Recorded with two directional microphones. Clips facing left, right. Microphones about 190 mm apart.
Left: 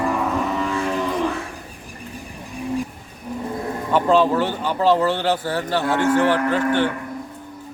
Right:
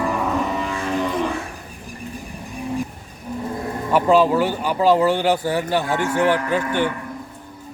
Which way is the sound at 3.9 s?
10° right (ahead or behind).